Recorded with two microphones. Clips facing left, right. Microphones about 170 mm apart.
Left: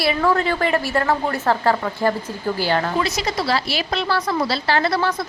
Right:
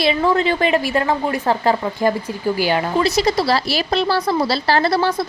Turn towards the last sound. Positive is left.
turn(degrees=-35)  # may be behind; listen again after turning